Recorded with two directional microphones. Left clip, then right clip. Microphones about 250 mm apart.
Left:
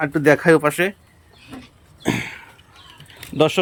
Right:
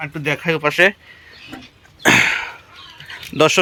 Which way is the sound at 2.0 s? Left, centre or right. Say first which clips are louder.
Right 12 dB; centre.